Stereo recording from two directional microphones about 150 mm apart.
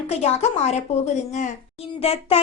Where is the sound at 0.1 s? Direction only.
45° left (ahead or behind).